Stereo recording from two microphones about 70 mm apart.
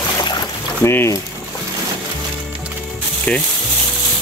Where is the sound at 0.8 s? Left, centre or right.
Left.